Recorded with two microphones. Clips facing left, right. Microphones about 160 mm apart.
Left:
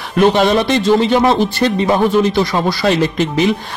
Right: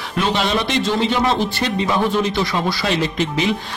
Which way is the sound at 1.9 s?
45° left (ahead or behind).